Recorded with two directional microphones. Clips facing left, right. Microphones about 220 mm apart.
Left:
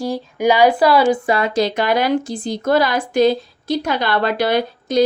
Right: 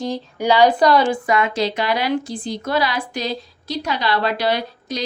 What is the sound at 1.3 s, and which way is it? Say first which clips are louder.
A woman's voice: left 2 dB; 35° left (ahead or behind).